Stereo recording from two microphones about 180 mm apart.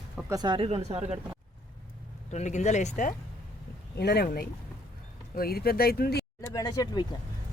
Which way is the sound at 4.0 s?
65° left (ahead or behind).